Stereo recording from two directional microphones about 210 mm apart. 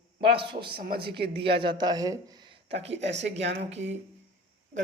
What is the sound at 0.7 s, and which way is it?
Speech, 45° right (ahead or behind).